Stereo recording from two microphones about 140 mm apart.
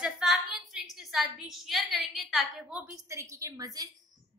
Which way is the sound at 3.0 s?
20° right (ahead or behind).